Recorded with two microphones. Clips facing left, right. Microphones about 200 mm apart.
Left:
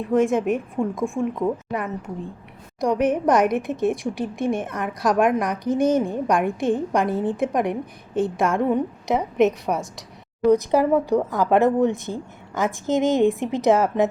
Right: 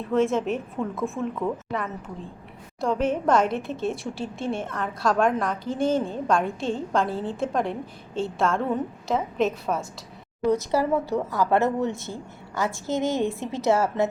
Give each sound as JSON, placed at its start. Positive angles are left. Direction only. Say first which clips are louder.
{"t": 0.1, "sound": "a woman's voice", "louder": "left 3 dB", "side_deg": 15}